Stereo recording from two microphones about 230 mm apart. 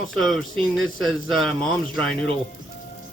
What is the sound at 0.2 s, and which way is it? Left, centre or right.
Speech, centre.